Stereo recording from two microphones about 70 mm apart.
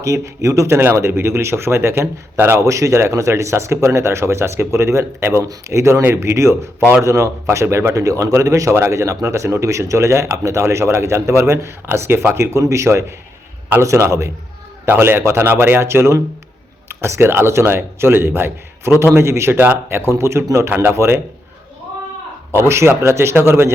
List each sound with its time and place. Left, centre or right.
0.0 s a man's voice: right
2.6 s a man's voice: right
20.7 s speech: right
20.9 s a man's voice: right
22.5 s a man's voice: right